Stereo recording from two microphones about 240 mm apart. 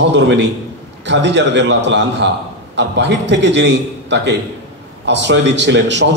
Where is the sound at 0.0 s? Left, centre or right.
Right.